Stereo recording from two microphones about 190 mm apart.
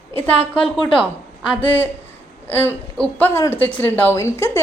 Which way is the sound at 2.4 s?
10° left (ahead or behind).